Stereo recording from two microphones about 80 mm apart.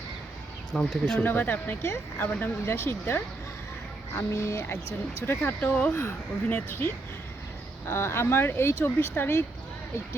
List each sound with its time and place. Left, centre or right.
0.7 s speech: centre
1.2 s speech: left
4.2 s speech: left; by 5.9 s centre
5.9 s speech: left